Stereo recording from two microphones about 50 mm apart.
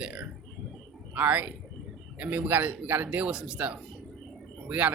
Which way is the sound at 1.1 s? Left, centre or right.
Right.